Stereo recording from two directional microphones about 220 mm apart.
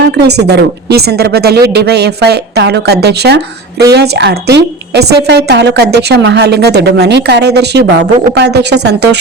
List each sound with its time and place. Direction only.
0.0 s a woman's voice: 50° right (ahead or behind)